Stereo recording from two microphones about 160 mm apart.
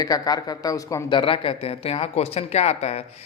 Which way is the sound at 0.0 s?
25° left (ahead or behind).